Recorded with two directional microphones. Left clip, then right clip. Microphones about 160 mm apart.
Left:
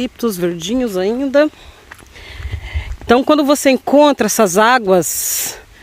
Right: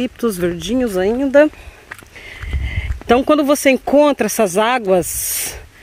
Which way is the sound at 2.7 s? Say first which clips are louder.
Left 2 dB; 20° left (ahead or behind).